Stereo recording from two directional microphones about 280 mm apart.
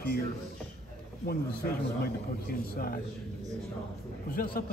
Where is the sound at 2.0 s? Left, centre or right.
Left.